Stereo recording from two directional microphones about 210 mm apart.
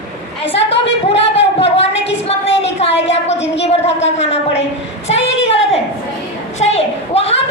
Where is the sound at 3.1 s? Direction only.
30° left (ahead or behind).